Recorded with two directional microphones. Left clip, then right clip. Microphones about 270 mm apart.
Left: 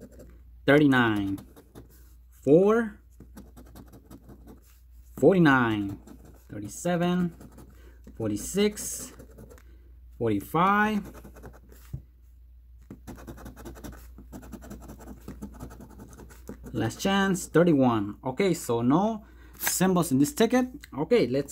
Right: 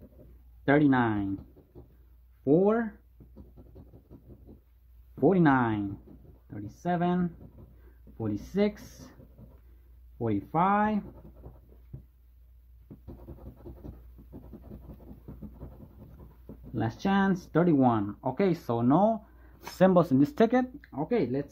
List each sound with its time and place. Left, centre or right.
0.7 s speech: centre
2.4 s speech: centre
5.2 s speech: centre
10.1 s speech: centre
16.7 s speech: centre